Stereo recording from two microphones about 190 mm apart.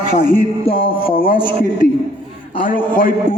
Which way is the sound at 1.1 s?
50° left (ahead or behind).